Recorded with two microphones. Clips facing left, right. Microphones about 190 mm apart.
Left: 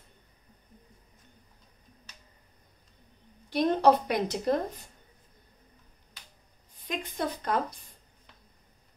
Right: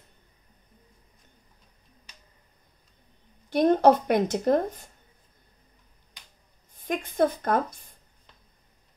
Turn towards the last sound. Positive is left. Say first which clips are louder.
# right 4 dB
turn(degrees=-50)  # may be behind; listen again after turning